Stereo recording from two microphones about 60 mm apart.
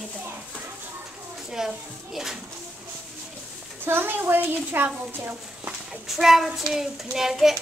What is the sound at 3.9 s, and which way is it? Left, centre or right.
Speech, right.